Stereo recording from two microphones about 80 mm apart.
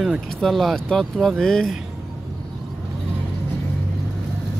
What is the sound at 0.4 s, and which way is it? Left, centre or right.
Speech, centre.